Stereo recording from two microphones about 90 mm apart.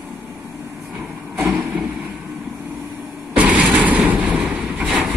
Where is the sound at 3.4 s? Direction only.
15° right (ahead or behind).